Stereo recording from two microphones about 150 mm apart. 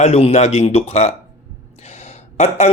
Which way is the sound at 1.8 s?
45° left (ahead or behind).